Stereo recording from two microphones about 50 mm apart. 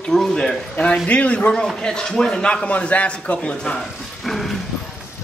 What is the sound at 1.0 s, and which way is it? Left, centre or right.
Speech, left.